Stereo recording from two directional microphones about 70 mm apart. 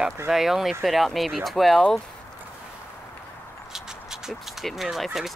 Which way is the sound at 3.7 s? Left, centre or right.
Centre.